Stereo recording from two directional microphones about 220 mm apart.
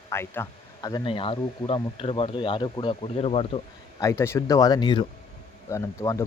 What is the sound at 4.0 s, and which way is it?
Speech, 10° left (ahead or behind).